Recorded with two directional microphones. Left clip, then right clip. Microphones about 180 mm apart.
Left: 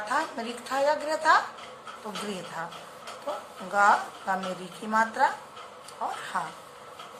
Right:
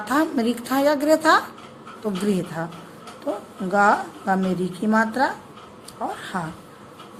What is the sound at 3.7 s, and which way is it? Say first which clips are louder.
A woman's voice: right 4 dB; 30° right (ahead or behind).